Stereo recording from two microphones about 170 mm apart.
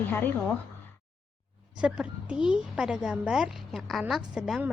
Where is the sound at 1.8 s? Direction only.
5° right (ahead or behind).